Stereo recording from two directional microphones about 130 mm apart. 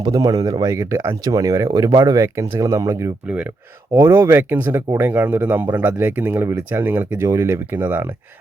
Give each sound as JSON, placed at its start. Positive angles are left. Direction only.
{"t": 0.0, "sound": "speech", "side_deg": -30}